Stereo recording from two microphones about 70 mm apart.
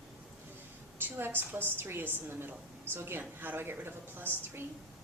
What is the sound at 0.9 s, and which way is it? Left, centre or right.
A woman's voice, right.